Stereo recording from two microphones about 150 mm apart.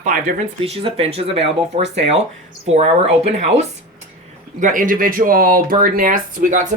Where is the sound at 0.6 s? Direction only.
40° right (ahead or behind).